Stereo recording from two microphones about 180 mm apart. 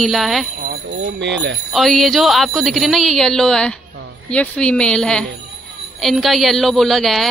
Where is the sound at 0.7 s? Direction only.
70° right (ahead or behind).